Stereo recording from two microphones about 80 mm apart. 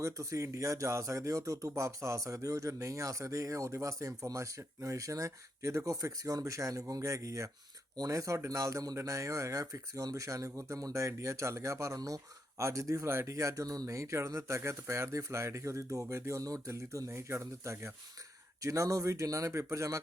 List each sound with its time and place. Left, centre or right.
0.0 s speech: right